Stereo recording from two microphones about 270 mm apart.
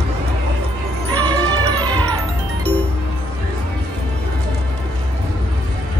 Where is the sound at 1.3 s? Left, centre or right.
Centre.